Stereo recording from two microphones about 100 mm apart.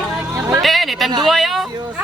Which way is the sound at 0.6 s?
Centre (ahead or behind).